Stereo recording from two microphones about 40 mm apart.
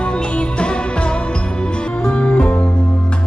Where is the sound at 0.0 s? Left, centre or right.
Left.